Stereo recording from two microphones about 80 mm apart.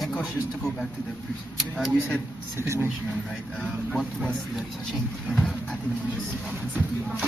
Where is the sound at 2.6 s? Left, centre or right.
Right.